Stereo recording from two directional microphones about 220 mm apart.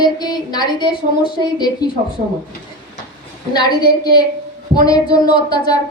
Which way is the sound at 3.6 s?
20° left (ahead or behind).